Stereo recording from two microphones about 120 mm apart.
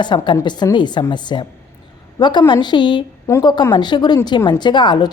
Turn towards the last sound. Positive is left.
turn(degrees=40)  # may be behind; listen again after turning